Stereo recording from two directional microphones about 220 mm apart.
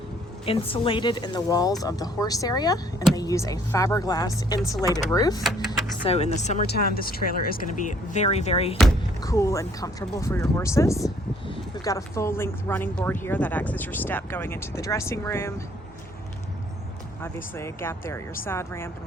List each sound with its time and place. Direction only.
0.4 s speech: 25° left (ahead or behind)
6.1 s speech: 30° left (ahead or behind)
6.7 s speech: 45° left (ahead or behind); by 8.8 s 25° left (ahead or behind)
9.2 s speech: 15° left (ahead or behind)
17.2 s speech: 10° left (ahead or behind)